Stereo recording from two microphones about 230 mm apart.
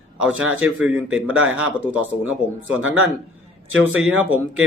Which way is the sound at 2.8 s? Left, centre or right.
Right.